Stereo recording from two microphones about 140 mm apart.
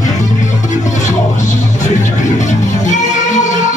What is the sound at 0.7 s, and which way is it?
Music, 60° left (ahead or behind).